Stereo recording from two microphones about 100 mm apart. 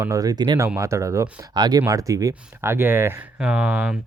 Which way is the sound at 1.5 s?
45° right (ahead or behind).